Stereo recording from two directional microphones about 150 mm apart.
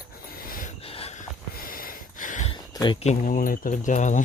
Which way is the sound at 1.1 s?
70° left (ahead or behind).